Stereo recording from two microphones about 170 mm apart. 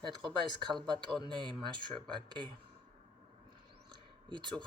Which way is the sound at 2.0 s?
5° left (ahead or behind).